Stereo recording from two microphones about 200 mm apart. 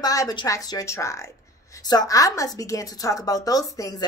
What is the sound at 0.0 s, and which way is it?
A woman's voice, 20° left (ahead or behind).